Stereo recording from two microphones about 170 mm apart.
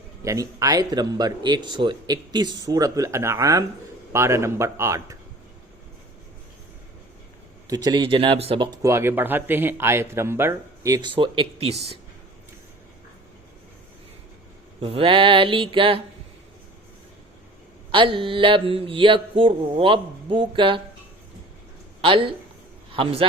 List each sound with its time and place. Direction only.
0.3 s a man's voice: 20° right (ahead or behind)
7.7 s speech: 20° right (ahead or behind)
14.8 s mantra: 35° right (ahead or behind)
17.9 s mantra: 30° right (ahead or behind)
22.0 s mantra: 30° right (ahead or behind)
22.9 s a man's voice: 30° right (ahead or behind)